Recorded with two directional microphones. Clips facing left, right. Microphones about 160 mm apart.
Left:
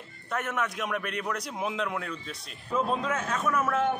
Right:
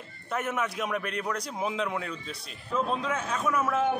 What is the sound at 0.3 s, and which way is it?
Speech, centre (ahead or behind).